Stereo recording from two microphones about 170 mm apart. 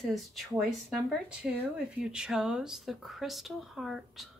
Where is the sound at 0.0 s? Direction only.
Centre (ahead or behind).